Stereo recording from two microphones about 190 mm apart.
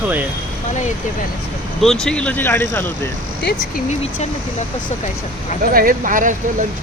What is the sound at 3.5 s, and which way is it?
Speech, 40° left (ahead or behind).